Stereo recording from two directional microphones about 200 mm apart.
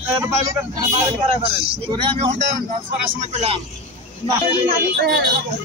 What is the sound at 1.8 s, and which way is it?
Speech, 25° right (ahead or behind).